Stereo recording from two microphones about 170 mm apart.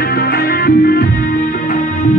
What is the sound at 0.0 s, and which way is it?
Music, 65° left (ahead or behind).